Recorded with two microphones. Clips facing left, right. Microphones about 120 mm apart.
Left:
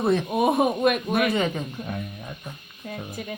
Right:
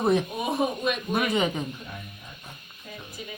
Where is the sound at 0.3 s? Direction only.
55° left (ahead or behind).